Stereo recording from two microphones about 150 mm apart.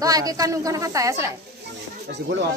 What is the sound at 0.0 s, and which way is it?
A woman's voice, 25° right (ahead or behind).